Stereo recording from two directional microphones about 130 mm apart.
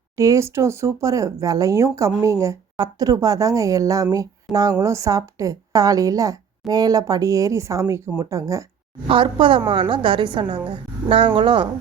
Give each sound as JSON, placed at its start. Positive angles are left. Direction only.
{"t": 0.2, "sound": "speech", "side_deg": -25}
{"t": 9.0, "sound": "a woman's voice", "side_deg": -40}